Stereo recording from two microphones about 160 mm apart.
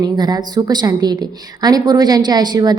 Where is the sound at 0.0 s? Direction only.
25° right (ahead or behind).